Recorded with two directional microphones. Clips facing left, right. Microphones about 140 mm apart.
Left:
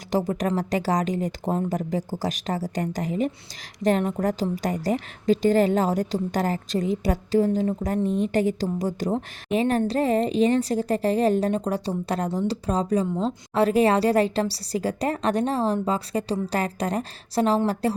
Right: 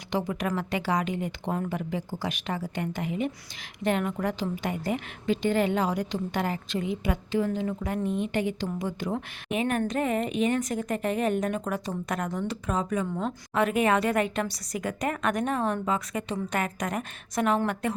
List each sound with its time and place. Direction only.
0.1 s a woman's voice: 40° left (ahead or behind)